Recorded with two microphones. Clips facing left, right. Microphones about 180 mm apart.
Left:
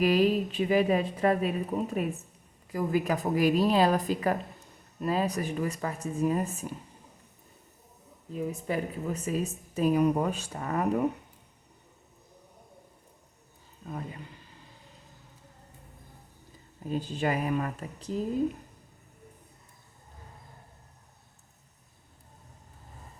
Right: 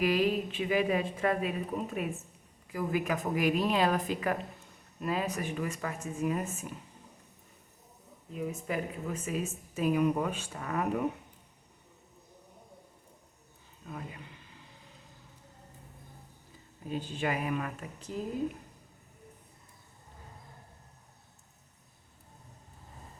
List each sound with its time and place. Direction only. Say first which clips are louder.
0.0 s speech: left 4 dB; 35° left (ahead or behind)
8.3 s speech: left 3 dB; 35° left (ahead or behind)
13.8 s speech: left 4 dB; 40° left (ahead or behind)
16.9 s speech: left 4 dB; 40° left (ahead or behind)